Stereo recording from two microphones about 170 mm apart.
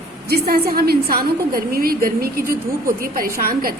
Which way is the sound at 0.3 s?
65° right (ahead or behind).